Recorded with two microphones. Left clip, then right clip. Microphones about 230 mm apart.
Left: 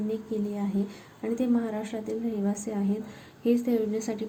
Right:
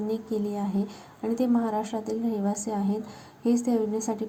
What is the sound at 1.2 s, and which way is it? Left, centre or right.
A woman's voice, centre.